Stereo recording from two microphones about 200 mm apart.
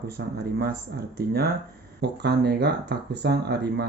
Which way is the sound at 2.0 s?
55° right (ahead or behind).